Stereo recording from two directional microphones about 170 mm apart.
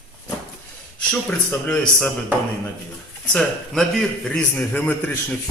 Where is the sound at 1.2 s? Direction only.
5° left (ahead or behind).